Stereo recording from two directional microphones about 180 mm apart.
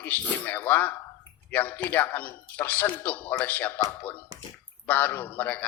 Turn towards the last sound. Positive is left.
turn(degrees=10)  # may be behind; listen again after turning